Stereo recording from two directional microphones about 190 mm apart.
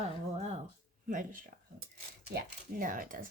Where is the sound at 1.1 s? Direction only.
45° right (ahead or behind).